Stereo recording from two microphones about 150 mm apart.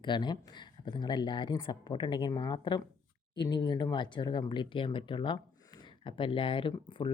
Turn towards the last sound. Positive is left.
turn(degrees=35)  # may be behind; listen again after turning